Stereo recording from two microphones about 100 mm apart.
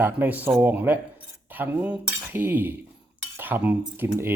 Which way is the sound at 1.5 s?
15° right (ahead or behind).